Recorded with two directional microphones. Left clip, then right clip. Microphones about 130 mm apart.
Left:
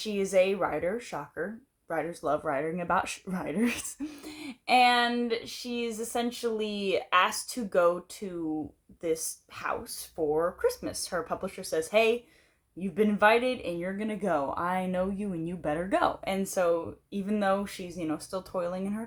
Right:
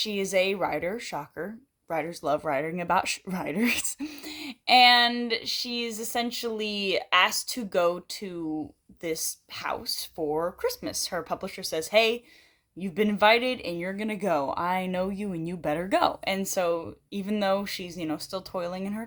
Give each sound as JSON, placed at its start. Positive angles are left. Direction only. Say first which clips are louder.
{"t": 0.0, "sound": "speech", "louder": "even", "side_deg": -35}
{"t": 13.7, "sound": "speech", "louder": "right 2 dB", "side_deg": -40}